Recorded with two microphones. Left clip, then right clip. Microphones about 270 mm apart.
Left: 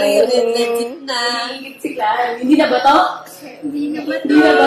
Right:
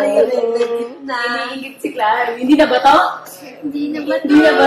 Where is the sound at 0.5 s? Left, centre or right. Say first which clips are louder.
Left 1 dB; left.